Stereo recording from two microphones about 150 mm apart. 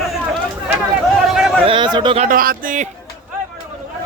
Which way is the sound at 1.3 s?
5° right (ahead or behind).